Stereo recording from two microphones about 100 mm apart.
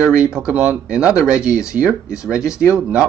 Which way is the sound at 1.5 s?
30° left (ahead or behind).